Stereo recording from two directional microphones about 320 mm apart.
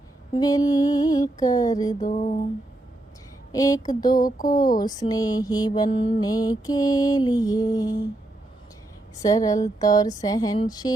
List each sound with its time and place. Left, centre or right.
0.3 s mantra: centre
2.0 s a sound: left
3.5 s mantra: centre
4.1 s a sound: left
4.9 s mantra: centre
9.2 s mantra: centre